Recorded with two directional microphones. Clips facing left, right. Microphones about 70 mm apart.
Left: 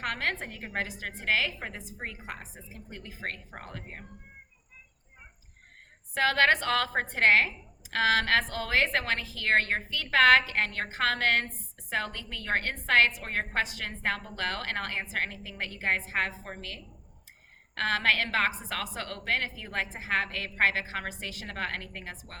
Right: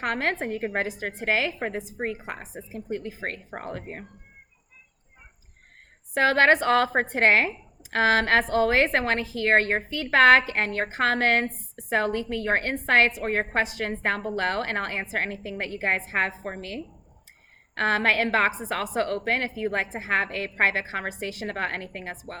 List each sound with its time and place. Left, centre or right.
0.0 s a woman's voice: right
6.1 s a woman's voice: right